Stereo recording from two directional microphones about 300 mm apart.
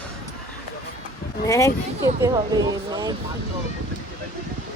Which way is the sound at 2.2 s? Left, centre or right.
Centre.